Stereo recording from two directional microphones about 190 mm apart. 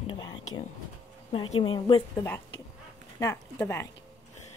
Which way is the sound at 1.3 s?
30° left (ahead or behind).